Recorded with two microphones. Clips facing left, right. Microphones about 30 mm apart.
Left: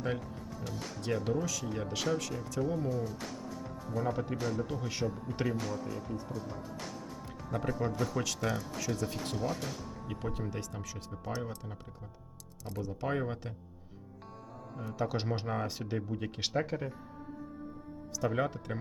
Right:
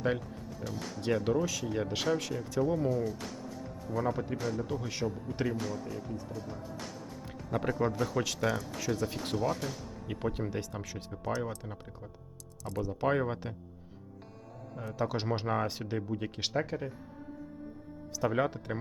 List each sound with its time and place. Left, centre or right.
0.6 s speech: centre
1.0 s speech: centre
7.5 s speech: centre
7.8 s speech: centre
10.1 s speech: centre
14.9 s speech: centre
15.4 s speech: centre
18.2 s speech: centre